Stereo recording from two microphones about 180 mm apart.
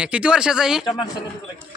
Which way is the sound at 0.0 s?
5° right (ahead or behind).